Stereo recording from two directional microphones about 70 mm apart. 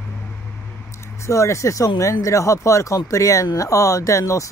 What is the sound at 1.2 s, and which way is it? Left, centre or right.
Speech, left.